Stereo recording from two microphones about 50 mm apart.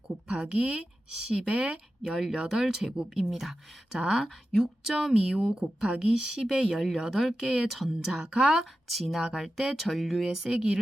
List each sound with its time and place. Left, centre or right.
0.3 s speech: centre
8.1 s speech: centre
8.6 s speech: centre